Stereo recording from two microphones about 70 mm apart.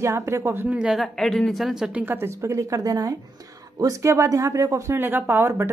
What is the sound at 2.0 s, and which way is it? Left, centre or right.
Speech, right.